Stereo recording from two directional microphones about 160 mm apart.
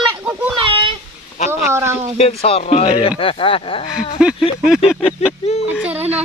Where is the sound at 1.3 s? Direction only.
45° left (ahead or behind).